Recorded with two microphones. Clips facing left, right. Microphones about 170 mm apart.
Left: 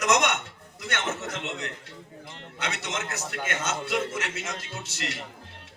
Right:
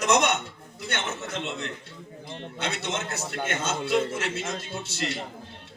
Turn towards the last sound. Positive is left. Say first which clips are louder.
# right 4 dB
turn(degrees=-30)  # may be behind; listen again after turning